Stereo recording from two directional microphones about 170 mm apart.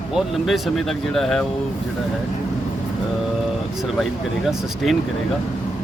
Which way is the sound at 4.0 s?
Centre (ahead or behind).